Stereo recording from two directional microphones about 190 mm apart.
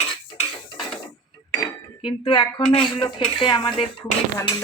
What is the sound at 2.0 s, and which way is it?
Speech, 30° left (ahead or behind).